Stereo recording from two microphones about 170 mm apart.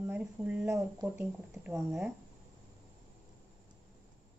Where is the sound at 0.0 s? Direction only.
10° right (ahead or behind).